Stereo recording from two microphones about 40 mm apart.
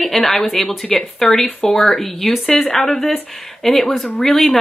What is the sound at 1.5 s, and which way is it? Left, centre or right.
Speech, left.